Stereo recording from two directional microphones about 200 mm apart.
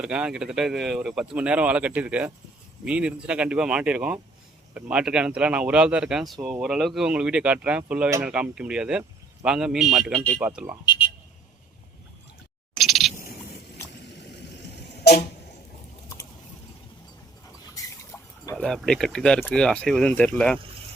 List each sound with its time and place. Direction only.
0.0 s speech: 5° right (ahead or behind)
10.4 s speech: 5° right (ahead or behind)
10.8 s a sound: 25° left (ahead or behind)
12.7 s cat: centre (ahead or behind)
17.7 s water: 15° left (ahead or behind)
18.5 s speech: centre (ahead or behind)